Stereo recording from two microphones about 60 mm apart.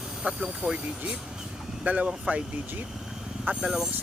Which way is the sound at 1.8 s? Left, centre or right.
Centre.